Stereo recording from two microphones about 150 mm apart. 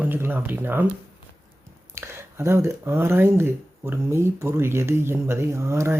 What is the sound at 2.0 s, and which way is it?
Speech, 15° right (ahead or behind).